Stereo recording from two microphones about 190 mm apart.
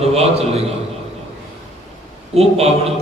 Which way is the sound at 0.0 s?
30° right (ahead or behind).